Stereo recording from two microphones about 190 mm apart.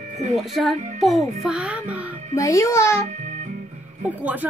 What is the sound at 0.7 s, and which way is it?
Music, 40° right (ahead or behind).